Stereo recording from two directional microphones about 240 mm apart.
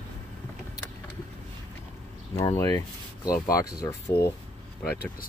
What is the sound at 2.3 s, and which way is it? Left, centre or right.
Speech, centre.